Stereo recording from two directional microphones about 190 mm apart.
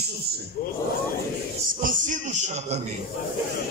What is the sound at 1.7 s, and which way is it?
A man's voice, 45° right (ahead or behind).